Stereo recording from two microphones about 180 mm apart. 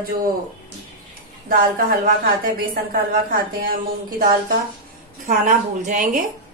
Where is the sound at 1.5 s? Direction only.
55° right (ahead or behind).